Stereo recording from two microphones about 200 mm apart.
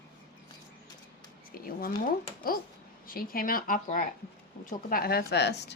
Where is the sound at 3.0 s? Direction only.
45° left (ahead or behind).